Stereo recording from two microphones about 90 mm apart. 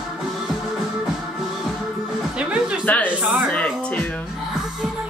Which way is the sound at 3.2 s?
15° right (ahead or behind).